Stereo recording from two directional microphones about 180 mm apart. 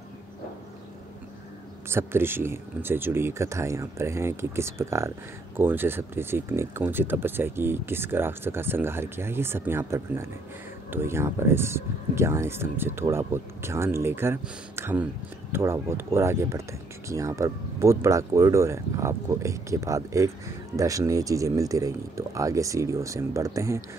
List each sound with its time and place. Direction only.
1.9 s speech: 15° right (ahead or behind)